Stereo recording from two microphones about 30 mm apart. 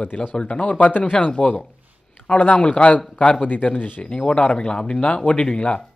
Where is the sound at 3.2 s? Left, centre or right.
Left.